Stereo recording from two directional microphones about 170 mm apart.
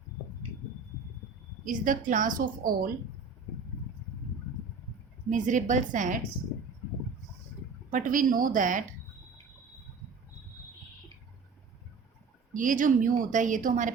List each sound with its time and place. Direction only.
1.6 s a woman's voice: 50° right (ahead or behind)
5.3 s a woman's voice: 45° right (ahead or behind)
7.9 s a woman's voice: 50° right (ahead or behind)
12.5 s a woman's voice: 50° right (ahead or behind)